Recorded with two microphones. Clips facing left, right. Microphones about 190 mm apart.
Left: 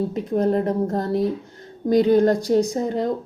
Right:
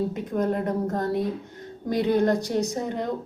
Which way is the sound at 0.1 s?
30° left (ahead or behind).